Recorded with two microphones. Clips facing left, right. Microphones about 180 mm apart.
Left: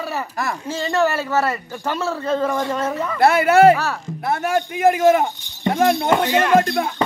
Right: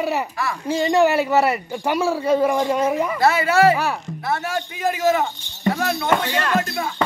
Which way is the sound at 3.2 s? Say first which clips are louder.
Left 5 dB; 55° left (ahead or behind).